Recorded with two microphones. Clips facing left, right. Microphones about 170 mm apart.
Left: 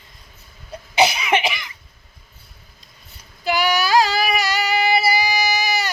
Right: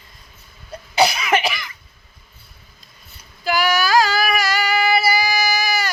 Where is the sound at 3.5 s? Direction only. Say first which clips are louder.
Even; 25° left (ahead or behind).